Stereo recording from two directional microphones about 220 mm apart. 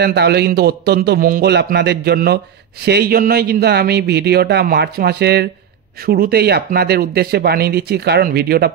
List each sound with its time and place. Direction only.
0.0 s a man's voice: 45° right (ahead or behind)